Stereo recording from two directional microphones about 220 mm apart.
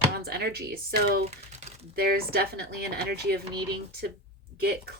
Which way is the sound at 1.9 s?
45° right (ahead or behind).